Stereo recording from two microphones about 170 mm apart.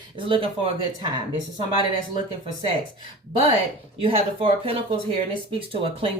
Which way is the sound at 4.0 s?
30° right (ahead or behind).